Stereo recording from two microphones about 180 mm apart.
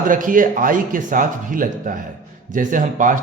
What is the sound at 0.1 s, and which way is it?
A man's voice, 50° right (ahead or behind).